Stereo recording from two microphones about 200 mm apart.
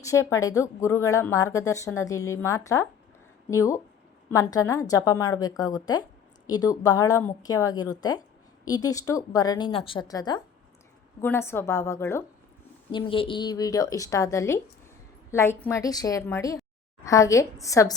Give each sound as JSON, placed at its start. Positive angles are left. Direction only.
{"t": 0.0, "sound": "a woman's voice", "side_deg": 15}
{"t": 12.9, "sound": "a woman's voice", "side_deg": 25}